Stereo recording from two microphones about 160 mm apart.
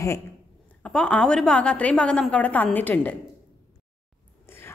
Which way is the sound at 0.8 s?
5° left (ahead or behind).